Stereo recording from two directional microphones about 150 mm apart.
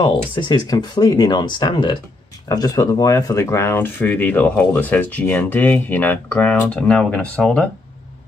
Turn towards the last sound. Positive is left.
turn(degrees=5)  # may be behind; listen again after turning